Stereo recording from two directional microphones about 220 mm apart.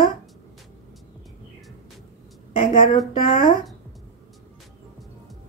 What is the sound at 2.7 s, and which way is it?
Speech, 40° left (ahead or behind).